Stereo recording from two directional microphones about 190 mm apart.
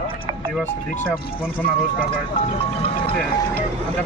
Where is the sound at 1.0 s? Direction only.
10° left (ahead or behind).